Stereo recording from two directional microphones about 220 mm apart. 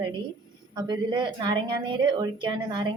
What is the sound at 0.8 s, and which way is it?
A woman's voice, 20° right (ahead or behind).